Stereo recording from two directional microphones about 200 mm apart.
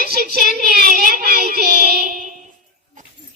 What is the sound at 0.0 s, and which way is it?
Child singing, 50° right (ahead or behind).